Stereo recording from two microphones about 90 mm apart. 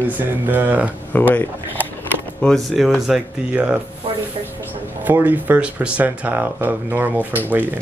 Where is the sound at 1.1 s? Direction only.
20° left (ahead or behind).